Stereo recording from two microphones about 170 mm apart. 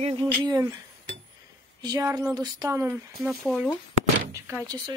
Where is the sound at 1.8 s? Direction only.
25° right (ahead or behind).